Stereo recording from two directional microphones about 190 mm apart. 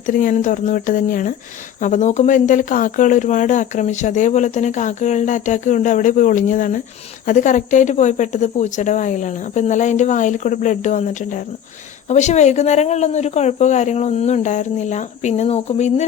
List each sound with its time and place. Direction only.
0.0 s speech: 45° left (ahead or behind)